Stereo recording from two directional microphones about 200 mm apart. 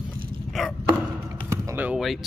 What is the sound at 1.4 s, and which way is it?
Speech, 10° right (ahead or behind).